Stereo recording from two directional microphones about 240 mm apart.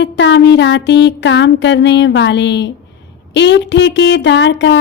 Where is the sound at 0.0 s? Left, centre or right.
Left.